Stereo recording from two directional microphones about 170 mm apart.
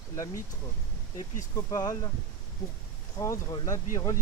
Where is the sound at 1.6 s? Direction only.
20° left (ahead or behind).